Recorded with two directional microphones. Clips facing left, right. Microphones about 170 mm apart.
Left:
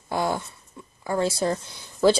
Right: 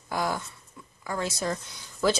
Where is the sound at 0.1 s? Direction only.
25° left (ahead or behind).